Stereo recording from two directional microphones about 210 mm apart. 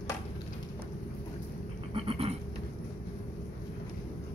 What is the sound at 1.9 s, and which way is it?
Goat, 25° right (ahead or behind).